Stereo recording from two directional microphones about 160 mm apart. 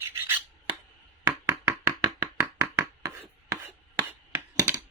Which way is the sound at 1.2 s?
15° right (ahead or behind).